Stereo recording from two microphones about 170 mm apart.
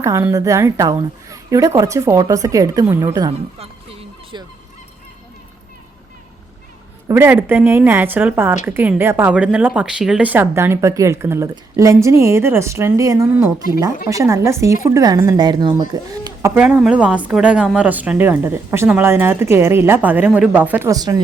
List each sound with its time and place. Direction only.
0.0 s a woman's voice: 15° right (ahead or behind)
3.6 s music: 35° right (ahead or behind)
7.1 s a woman's voice: 15° right (ahead or behind)
16.6 s speech: 5° right (ahead or behind)